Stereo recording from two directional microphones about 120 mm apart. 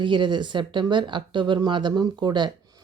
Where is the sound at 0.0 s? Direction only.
40° right (ahead or behind).